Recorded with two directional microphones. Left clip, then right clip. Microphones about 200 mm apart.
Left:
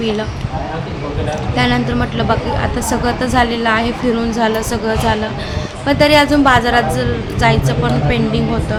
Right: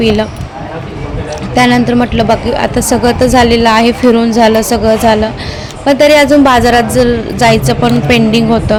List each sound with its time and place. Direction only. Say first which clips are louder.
0.0 s a woman's voice: right 8 dB; 35° right (ahead or behind)
1.5 s a woman's voice: right 9 dB; 35° right (ahead or behind)